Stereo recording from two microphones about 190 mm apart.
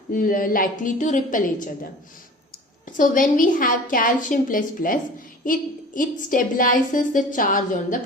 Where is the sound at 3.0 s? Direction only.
45° left (ahead or behind).